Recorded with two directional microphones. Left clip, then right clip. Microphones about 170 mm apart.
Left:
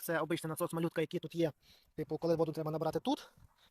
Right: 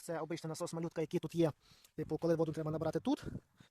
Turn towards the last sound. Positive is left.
turn(degrees=-40)  # may be behind; listen again after turning